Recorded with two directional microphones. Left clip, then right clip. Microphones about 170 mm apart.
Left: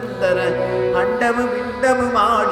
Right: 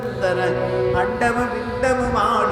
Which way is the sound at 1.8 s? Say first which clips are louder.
Left 3 dB; 20° left (ahead or behind).